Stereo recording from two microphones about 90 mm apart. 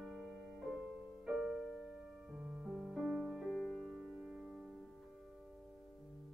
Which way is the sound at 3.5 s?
5° left (ahead or behind).